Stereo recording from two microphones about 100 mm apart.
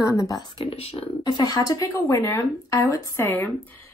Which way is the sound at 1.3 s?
40° left (ahead or behind).